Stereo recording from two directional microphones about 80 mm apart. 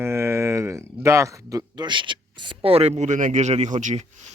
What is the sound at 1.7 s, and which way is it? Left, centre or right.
Speech, right.